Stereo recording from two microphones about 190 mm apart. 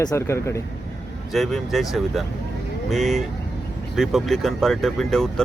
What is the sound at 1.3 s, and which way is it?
Speech, centre (ahead or behind).